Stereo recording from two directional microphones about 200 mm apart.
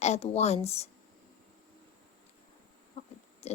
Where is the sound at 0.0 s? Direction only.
30° left (ahead or behind).